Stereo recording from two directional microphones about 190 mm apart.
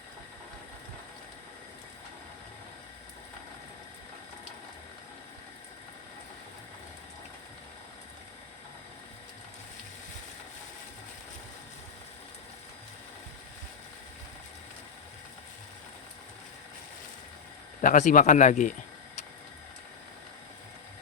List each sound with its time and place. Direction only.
17.7 s speech: 40° left (ahead or behind)